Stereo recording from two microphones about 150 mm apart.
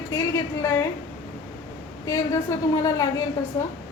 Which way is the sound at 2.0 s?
20° left (ahead or behind).